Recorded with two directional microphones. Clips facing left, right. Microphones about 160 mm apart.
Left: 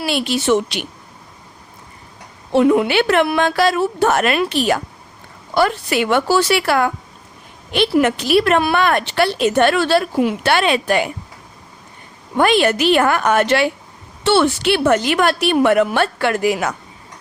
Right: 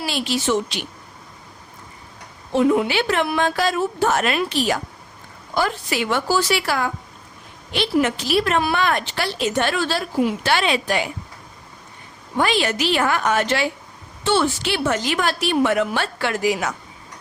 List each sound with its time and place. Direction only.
0.0 s a woman's voice: 60° left (ahead or behind)
2.5 s a woman's voice: 70° left (ahead or behind)
12.4 s a woman's voice: 55° left (ahead or behind)
14.3 s a woman's voice: 70° left (ahead or behind)